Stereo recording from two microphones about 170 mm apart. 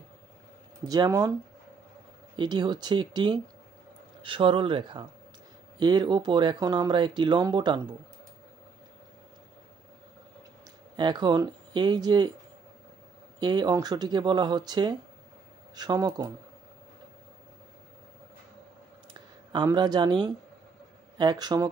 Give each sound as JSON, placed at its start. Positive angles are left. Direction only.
{"t": 0.8, "sound": "speech", "side_deg": -20}
{"t": 2.3, "sound": "speech", "side_deg": -25}
{"t": 11.0, "sound": "speech", "side_deg": -25}
{"t": 13.4, "sound": "speech", "side_deg": -25}
{"t": 19.5, "sound": "speech", "side_deg": -25}